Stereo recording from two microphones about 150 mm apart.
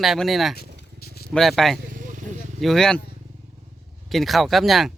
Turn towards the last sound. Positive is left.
turn(degrees=0)  # may be behind; listen again after turning